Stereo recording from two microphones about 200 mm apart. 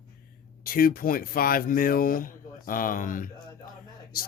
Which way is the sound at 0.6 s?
45° left (ahead or behind).